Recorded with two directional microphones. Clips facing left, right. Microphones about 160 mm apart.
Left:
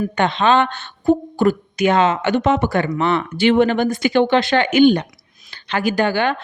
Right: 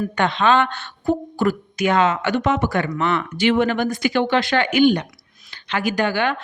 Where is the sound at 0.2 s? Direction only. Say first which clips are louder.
Left 2 dB; 25° left (ahead or behind).